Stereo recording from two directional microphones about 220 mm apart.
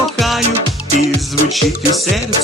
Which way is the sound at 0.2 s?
Centre (ahead or behind).